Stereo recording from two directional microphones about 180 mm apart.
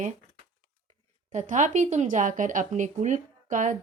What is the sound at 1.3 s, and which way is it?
Speech, 45° right (ahead or behind).